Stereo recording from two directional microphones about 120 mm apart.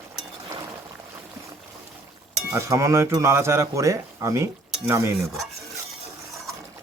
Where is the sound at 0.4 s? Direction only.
30° right (ahead or behind).